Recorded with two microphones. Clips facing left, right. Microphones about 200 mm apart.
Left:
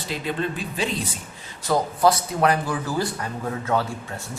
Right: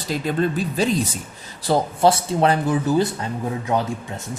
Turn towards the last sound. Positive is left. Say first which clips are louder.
# right 2 dB
turn(degrees=-20)  # may be behind; listen again after turning